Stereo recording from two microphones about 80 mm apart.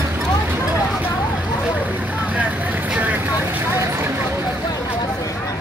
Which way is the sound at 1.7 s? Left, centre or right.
Right.